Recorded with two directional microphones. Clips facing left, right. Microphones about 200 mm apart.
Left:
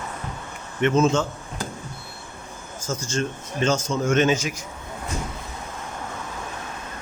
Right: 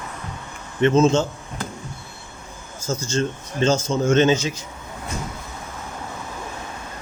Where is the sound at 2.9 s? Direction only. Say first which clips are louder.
Right 3 dB; 25° right (ahead or behind).